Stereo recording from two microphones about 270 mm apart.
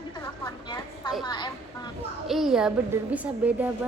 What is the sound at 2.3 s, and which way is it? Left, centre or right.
A woman's voice, centre.